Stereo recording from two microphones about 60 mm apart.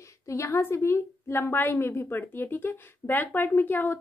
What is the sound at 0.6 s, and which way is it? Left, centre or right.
A woman's voice, left.